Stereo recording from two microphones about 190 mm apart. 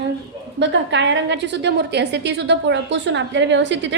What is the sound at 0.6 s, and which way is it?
A woman's voice, 70° right (ahead or behind).